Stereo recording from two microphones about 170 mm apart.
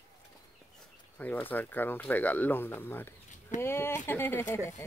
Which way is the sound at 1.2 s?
10° left (ahead or behind).